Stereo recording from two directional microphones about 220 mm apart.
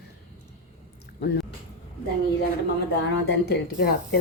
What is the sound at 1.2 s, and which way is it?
Speech, 50° left (ahead or behind).